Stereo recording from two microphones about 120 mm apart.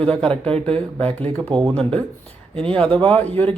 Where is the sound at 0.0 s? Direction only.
10° left (ahead or behind).